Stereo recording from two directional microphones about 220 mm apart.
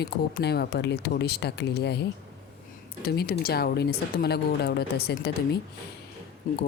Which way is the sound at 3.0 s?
45° left (ahead or behind).